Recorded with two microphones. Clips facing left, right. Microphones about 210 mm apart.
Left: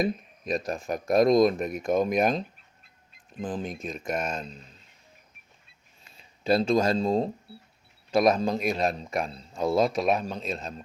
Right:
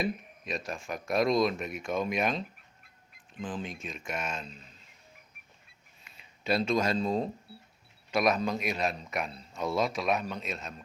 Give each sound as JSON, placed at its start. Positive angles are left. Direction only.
{"t": 0.0, "sound": "a man's voice", "side_deg": 40}
{"t": 2.8, "sound": "a sound", "side_deg": 25}
{"t": 3.4, "sound": "a man's voice", "side_deg": 40}
{"t": 6.1, "sound": "a man's voice", "side_deg": 35}